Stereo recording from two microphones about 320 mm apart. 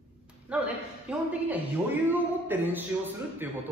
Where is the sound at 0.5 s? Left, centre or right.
Centre.